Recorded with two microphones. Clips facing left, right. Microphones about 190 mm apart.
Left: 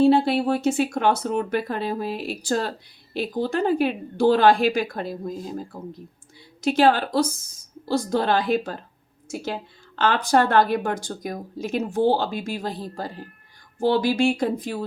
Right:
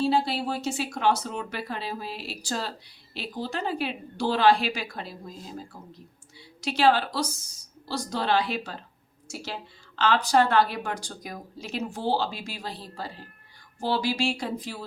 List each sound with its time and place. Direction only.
0.0 s speech: 60° left (ahead or behind)